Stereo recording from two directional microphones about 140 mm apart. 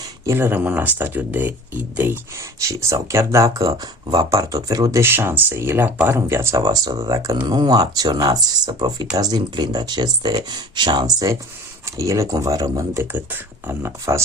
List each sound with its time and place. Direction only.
0.0 s speech: 20° right (ahead or behind)